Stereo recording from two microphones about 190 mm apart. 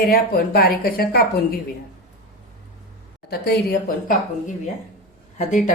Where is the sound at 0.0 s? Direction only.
55° left (ahead or behind).